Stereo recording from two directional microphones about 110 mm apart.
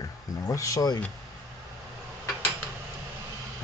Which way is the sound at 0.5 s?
30° left (ahead or behind).